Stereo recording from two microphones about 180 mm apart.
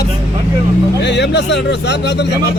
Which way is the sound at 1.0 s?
70° left (ahead or behind).